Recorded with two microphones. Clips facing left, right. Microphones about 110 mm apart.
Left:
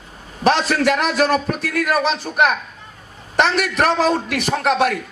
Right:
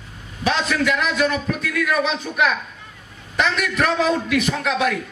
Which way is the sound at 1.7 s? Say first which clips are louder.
Left 2 dB; 40° left (ahead or behind).